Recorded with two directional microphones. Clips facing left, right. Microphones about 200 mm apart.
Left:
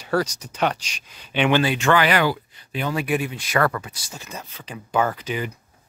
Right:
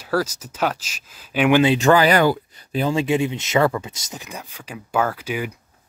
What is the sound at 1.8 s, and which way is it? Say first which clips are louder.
Speech: right 4 dB; 35° right (ahead or behind).